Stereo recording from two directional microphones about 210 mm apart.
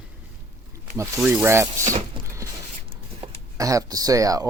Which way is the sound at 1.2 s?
Centre (ahead or behind).